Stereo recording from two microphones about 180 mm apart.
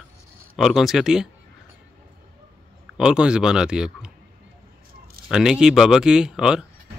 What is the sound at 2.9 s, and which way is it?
Speech, 5° right (ahead or behind).